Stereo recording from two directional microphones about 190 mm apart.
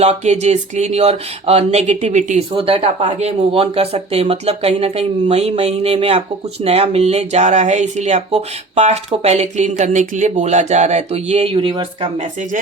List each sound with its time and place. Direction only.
0.0 s speech: 35° right (ahead or behind)